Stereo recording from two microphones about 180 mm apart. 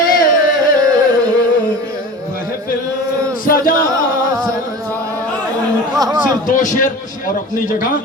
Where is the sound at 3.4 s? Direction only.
50° left (ahead or behind).